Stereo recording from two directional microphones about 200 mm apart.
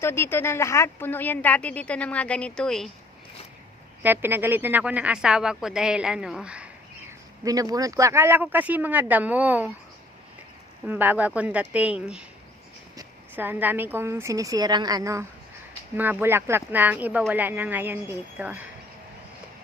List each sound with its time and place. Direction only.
0.0 s speech: 10° left (ahead or behind)
4.0 s speech: 10° right (ahead or behind)
7.4 s speech: 20° right (ahead or behind)
10.8 s speech: 10° right (ahead or behind)